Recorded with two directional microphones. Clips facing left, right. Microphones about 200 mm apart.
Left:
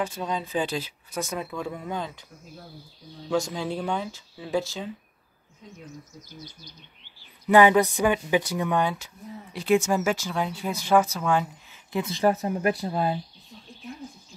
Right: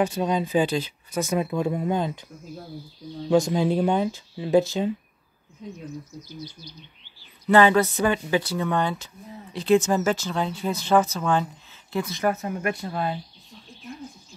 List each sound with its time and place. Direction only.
0.0 s speech: 15° right (ahead or behind)
0.7 s speech: 5° left (ahead or behind)
1.3 s speech: 15° right (ahead or behind)
3.4 s speech: 20° right (ahead or behind)
6.2 s speech: 50° left (ahead or behind)
7.4 s speech: 15° left (ahead or behind)
12.0 s speech: 30° left (ahead or behind)